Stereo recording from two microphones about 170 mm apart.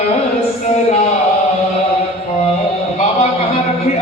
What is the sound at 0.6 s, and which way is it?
Speech, 40° left (ahead or behind).